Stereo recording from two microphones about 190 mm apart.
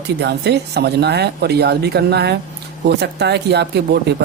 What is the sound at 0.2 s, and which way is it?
Speech, 60° right (ahead or behind).